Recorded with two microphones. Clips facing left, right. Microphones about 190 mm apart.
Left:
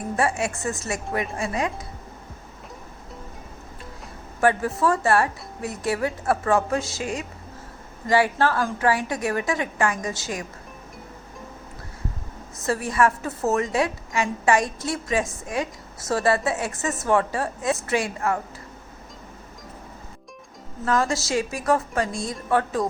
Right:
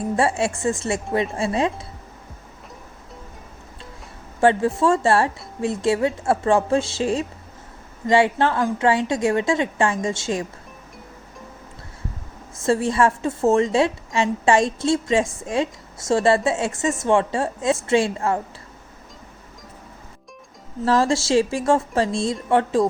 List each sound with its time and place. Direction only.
0.2 s a woman's voice: 30° right (ahead or behind)
4.4 s a woman's voice: 25° right (ahead or behind)
12.6 s a woman's voice: 25° right (ahead or behind)
20.8 s a woman's voice: 30° right (ahead or behind)